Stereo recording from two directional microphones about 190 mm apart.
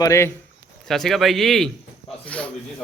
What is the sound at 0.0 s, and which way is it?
Speech, 15° left (ahead or behind).